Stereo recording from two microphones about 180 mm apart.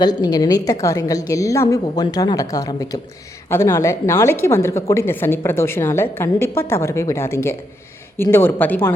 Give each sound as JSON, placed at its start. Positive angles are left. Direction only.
{"t": 0.0, "sound": "a woman's voice", "side_deg": 25}